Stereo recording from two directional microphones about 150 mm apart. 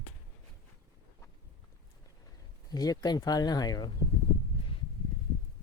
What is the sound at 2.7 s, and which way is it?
Speech, 25° left (ahead or behind).